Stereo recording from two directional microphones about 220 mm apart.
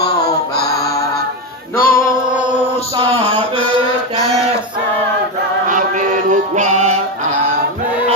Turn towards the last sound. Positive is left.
turn(degrees=-30)  # may be behind; listen again after turning